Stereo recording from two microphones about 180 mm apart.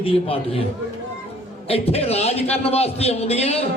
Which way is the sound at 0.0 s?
30° left (ahead or behind).